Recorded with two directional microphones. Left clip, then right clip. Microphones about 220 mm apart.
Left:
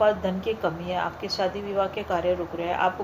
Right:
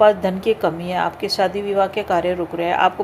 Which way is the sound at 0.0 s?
45° right (ahead or behind).